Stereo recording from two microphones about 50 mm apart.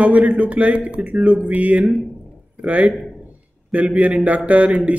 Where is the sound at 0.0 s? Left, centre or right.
Right.